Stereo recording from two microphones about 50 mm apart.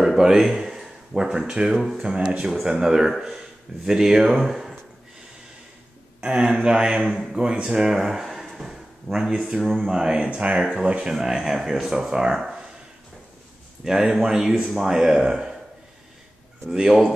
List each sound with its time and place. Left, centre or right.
0.0 s speech: centre
6.2 s speech: centre
8.5 s a sound: centre
9.6 s speech: centre
11.1 s speech: centre
12.4 s a sound: centre
13.8 s speech: centre
16.7 s speech: centre